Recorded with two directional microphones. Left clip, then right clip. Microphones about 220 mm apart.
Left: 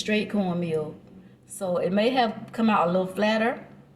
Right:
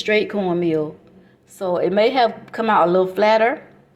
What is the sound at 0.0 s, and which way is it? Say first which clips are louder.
A woman's voice: right 8 dB; 30° right (ahead or behind).